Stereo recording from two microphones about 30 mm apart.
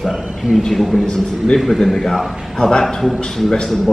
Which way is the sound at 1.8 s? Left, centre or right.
Centre.